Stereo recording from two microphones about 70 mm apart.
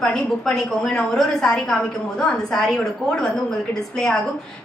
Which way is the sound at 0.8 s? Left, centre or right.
Centre.